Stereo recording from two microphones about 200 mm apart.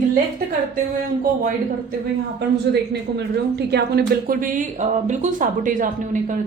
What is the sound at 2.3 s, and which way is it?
A woman's voice, 55° right (ahead or behind).